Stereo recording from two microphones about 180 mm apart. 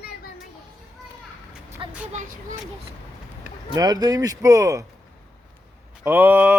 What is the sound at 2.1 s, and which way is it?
Speech, 50° right (ahead or behind).